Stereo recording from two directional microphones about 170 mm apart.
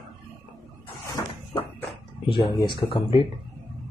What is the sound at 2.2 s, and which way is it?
Speech, 30° left (ahead or behind).